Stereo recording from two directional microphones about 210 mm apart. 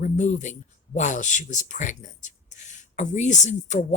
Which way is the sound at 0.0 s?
35° left (ahead or behind).